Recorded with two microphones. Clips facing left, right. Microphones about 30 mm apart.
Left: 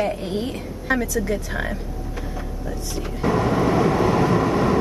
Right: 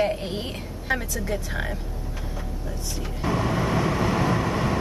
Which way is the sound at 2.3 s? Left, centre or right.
Centre.